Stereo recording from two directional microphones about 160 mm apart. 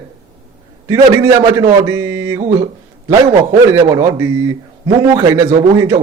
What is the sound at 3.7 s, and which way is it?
A man's voice, 20° right (ahead or behind).